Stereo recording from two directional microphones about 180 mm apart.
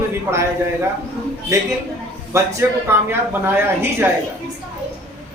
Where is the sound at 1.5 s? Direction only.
15° right (ahead or behind).